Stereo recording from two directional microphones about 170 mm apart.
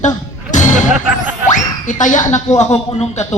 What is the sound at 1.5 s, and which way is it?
Boing, 50° left (ahead or behind).